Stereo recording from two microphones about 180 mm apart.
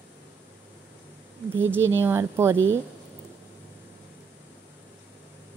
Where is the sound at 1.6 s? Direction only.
15° right (ahead or behind).